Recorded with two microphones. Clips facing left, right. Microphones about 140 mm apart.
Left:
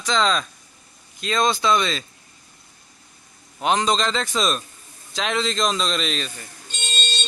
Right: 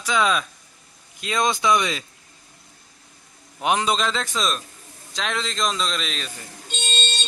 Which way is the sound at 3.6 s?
10° right (ahead or behind).